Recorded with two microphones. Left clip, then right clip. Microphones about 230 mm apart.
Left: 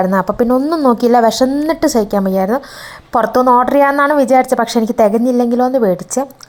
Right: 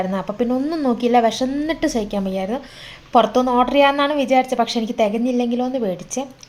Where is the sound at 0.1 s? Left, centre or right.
Left.